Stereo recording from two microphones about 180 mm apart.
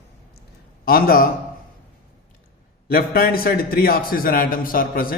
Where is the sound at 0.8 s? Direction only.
55° left (ahead or behind).